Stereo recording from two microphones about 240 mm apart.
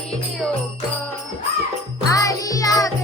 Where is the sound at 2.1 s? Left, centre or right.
Centre.